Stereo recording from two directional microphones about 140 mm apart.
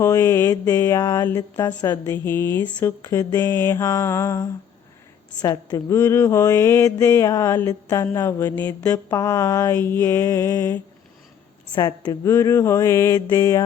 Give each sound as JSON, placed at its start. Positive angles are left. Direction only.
{"t": 0.0, "sound": "mantra", "side_deg": 20}
{"t": 1.2, "sound": "speech", "side_deg": 25}
{"t": 2.0, "sound": "mantra", "side_deg": 15}
{"t": 5.4, "sound": "speech", "side_deg": 25}
{"t": 9.0, "sound": "mantra", "side_deg": 20}
{"t": 11.7, "sound": "a woman's voice", "side_deg": 30}
{"t": 12.2, "sound": "speech", "side_deg": 20}